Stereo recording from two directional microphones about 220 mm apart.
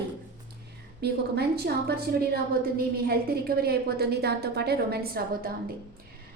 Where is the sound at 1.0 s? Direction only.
45° right (ahead or behind).